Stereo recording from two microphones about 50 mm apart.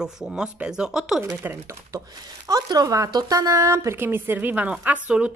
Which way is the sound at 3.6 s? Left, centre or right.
Right.